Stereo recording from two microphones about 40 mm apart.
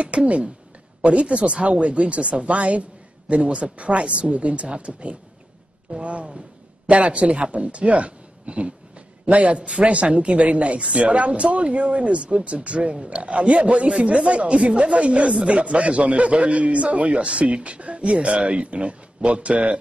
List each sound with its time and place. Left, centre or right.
0.0 s speech: right